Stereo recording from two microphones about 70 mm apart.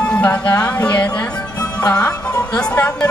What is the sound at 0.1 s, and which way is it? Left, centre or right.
Speech, left.